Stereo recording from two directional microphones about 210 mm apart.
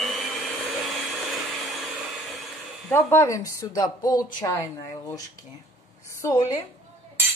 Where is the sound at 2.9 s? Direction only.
10° left (ahead or behind).